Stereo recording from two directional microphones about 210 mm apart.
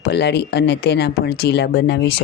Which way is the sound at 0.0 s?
50° left (ahead or behind).